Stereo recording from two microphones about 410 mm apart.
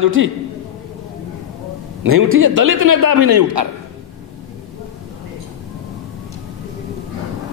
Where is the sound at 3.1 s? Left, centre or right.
Right.